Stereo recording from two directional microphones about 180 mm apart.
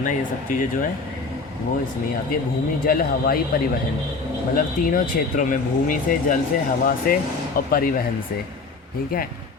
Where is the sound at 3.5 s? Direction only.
55° left (ahead or behind).